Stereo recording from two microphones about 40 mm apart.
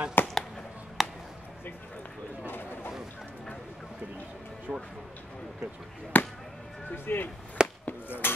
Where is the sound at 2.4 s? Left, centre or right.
Left.